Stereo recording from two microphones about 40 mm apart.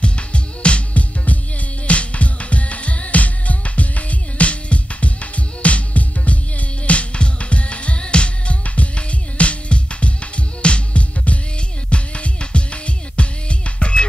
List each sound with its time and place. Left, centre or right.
0.0 s music: left